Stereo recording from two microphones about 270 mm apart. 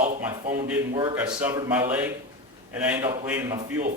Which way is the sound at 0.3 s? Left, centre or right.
Centre.